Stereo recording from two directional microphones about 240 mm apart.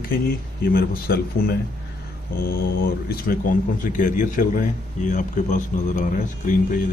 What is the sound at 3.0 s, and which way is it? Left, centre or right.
Speech, left.